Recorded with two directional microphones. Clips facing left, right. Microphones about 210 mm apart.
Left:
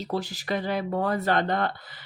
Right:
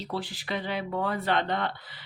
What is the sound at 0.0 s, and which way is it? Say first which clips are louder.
Speech: left 4 dB; 45° left (ahead or behind).